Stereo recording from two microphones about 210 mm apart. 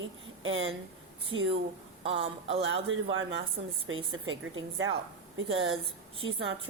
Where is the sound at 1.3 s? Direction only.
25° right (ahead or behind).